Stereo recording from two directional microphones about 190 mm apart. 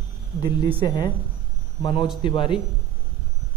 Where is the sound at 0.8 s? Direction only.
20° left (ahead or behind).